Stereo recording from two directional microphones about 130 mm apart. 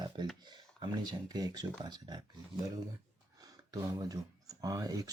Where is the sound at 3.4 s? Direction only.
25° right (ahead or behind).